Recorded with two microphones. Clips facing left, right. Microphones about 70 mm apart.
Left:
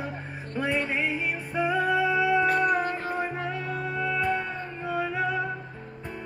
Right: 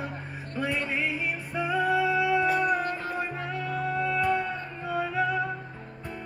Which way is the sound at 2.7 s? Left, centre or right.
Left.